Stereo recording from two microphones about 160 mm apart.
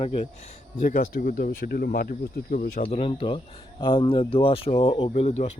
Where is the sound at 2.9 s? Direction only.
35° left (ahead or behind).